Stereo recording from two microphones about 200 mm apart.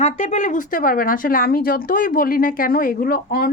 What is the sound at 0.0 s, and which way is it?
Speech, 35° left (ahead or behind).